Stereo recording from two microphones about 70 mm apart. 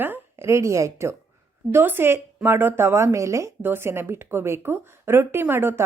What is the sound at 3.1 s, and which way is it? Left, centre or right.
Speech, right.